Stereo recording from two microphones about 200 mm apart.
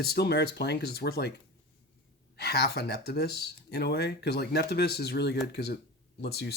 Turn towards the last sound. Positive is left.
turn(degrees=55)  # may be behind; listen again after turning